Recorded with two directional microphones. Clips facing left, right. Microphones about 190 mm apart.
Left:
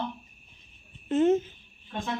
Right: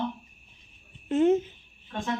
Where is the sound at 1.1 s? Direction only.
10° right (ahead or behind).